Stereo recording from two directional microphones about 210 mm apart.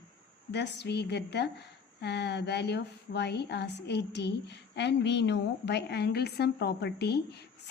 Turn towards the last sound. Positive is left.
turn(degrees=50)  # may be behind; listen again after turning